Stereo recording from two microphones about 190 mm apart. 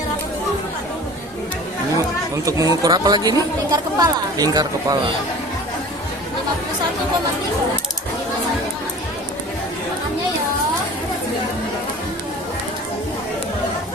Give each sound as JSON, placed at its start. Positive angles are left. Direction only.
{"t": 2.3, "sound": "speech", "side_deg": -15}